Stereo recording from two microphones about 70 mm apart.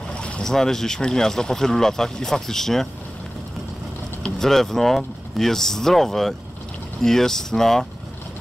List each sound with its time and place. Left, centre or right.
0.2 s speech: centre
4.2 s speech: centre